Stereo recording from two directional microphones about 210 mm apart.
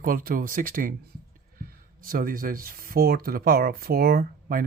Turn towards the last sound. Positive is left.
turn(degrees=-45)  # may be behind; listen again after turning